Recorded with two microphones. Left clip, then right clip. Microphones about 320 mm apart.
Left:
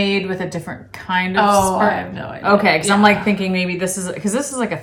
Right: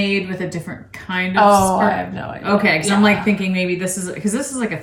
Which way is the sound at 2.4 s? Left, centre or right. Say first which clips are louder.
Left 3 dB; centre.